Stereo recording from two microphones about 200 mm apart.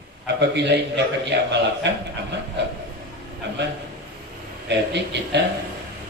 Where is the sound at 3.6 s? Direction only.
60° right (ahead or behind).